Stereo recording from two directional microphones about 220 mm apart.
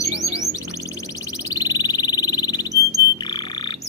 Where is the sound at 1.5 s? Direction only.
15° left (ahead or behind).